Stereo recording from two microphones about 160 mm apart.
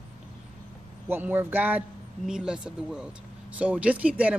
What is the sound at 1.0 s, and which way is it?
Speech, 15° right (ahead or behind).